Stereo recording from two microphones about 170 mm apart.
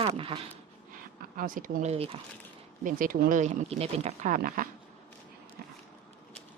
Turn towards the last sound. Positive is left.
turn(degrees=-55)  # may be behind; listen again after turning